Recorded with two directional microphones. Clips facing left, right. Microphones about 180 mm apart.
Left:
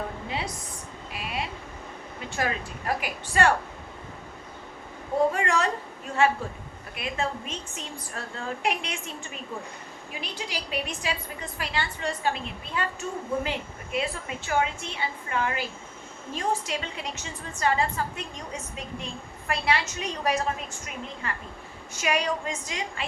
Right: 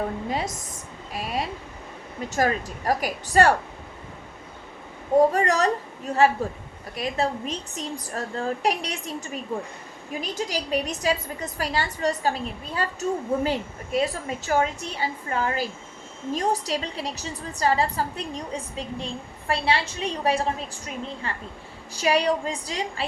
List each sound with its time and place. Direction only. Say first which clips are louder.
0.3 s a woman's voice: right 4 dB; 45° right (ahead or behind)
5.3 s a woman's voice: right 4 dB; 40° right (ahead or behind)